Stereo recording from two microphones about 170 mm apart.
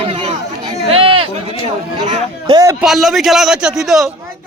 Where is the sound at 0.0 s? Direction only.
35° right (ahead or behind).